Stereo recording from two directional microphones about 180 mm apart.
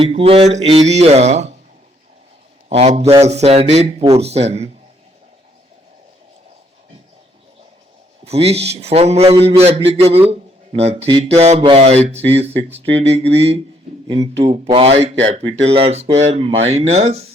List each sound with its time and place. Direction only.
0.0 s a man's voice: 30° right (ahead or behind)
2.6 s a man's voice: 35° right (ahead or behind)
8.2 s a man's voice: 35° right (ahead or behind)